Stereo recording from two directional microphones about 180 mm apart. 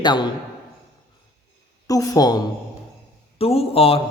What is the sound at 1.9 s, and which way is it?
Speech, 20° left (ahead or behind).